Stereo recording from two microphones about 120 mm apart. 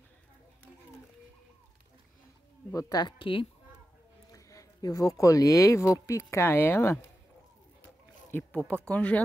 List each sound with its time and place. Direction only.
2.7 s speech: 30° left (ahead or behind)
4.3 s speech: 30° left (ahead or behind)
8.3 s speech: 15° left (ahead or behind)